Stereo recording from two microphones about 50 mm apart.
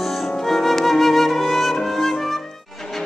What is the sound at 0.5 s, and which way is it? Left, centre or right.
Flute, centre.